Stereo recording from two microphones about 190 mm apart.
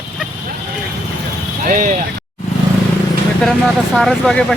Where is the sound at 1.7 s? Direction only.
45° right (ahead or behind).